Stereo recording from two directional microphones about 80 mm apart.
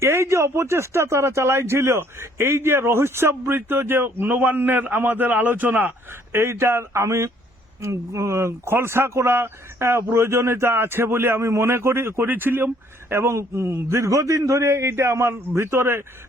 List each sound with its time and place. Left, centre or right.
0.0 s speech: right